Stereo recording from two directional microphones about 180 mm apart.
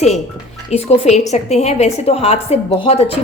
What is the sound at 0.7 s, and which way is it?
A woman's voice, 35° left (ahead or behind).